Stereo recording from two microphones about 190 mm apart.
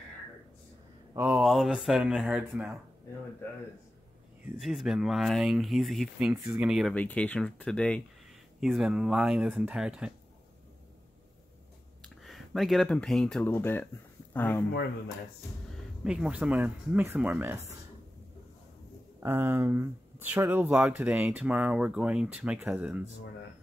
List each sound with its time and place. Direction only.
1.1 s speech: 5° right (ahead or behind)
4.6 s speech: centre (ahead or behind)
12.2 s speech: centre (ahead or behind)
16.0 s speech: 5° right (ahead or behind)
19.1 s speech: 10° right (ahead or behind)